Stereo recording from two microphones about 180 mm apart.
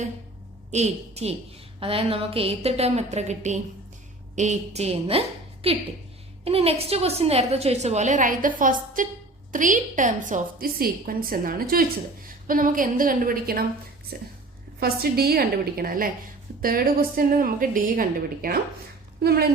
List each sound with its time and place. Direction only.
0.7 s a woman's voice: 35° right (ahead or behind)
6.4 s a woman's voice: 35° right (ahead or behind); by 13.7 s 55° right (ahead or behind)
14.8 s a woman's voice: 60° right (ahead or behind)